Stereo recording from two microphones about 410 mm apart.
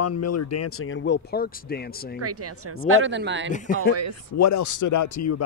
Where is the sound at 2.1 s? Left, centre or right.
Right.